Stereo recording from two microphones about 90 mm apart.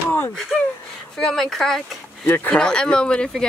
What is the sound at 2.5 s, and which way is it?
Speech, 10° left (ahead or behind).